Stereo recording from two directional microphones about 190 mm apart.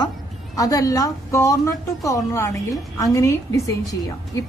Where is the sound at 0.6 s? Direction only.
20° left (ahead or behind).